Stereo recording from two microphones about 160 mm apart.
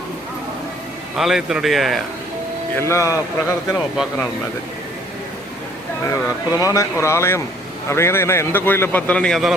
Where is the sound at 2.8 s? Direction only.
15° left (ahead or behind).